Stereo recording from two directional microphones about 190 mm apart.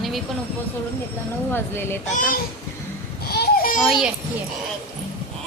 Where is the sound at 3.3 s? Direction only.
55° left (ahead or behind).